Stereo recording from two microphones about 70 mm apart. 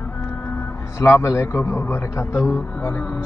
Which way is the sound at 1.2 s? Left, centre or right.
Left.